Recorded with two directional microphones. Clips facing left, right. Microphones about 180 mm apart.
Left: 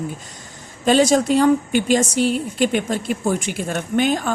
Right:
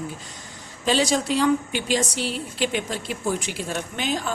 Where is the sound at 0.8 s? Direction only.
50° left (ahead or behind).